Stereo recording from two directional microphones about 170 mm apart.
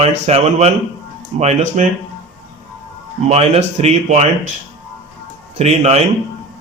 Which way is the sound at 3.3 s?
35° right (ahead or behind).